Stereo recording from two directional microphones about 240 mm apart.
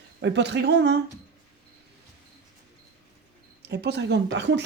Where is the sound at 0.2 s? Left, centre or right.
Right.